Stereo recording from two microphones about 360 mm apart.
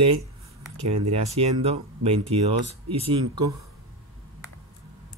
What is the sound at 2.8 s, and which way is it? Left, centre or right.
Speech, right.